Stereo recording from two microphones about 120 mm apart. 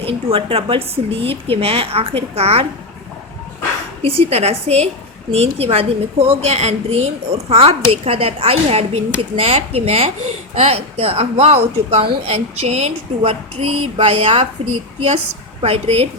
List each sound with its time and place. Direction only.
0.0 s a woman's voice: 50° right (ahead or behind)
4.0 s a woman's voice: 55° right (ahead or behind)
15.6 s a woman's voice: 60° right (ahead or behind)